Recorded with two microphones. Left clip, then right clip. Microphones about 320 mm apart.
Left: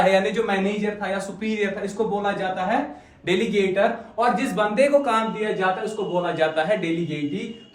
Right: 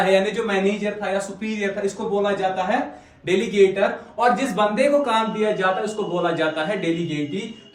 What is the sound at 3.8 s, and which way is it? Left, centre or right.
A man's voice, centre.